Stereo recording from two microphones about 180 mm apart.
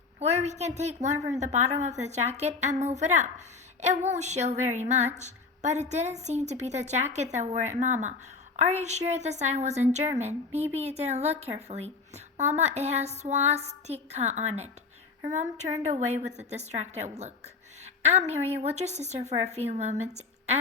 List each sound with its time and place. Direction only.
0.2 s a woman's voice: 40° right (ahead or behind)